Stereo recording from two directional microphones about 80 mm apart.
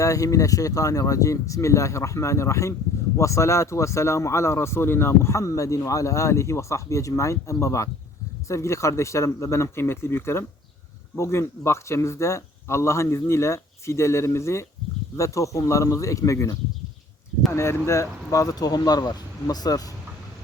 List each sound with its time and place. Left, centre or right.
0.0 s speech: left